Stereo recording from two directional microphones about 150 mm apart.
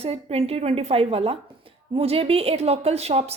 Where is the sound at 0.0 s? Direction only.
40° right (ahead or behind).